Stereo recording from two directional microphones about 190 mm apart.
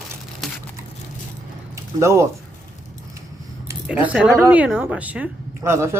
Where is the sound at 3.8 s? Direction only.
5° right (ahead or behind).